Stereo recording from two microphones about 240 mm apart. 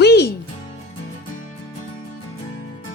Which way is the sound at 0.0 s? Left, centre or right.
Left.